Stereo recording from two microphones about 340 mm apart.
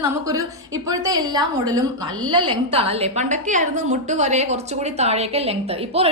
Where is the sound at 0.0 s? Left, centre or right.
Centre.